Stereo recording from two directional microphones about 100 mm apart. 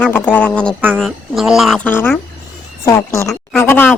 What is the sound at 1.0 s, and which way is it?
Speech, centre (ahead or behind).